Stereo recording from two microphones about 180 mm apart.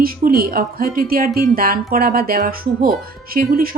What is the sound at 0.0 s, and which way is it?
Speech, 55° right (ahead or behind).